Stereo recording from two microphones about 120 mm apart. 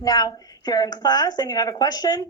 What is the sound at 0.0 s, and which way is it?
A woman's voice, 30° left (ahead or behind).